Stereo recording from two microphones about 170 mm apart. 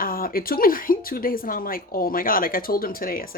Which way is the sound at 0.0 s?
55° left (ahead or behind).